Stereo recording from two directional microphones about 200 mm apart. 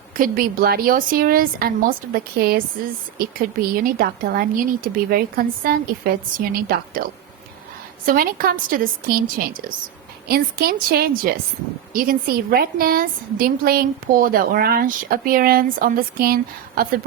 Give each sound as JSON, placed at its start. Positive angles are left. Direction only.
{"t": 0.2, "sound": "a woman's voice", "side_deg": -45}